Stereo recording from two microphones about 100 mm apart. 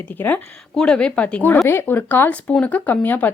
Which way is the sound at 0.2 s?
15° left (ahead or behind).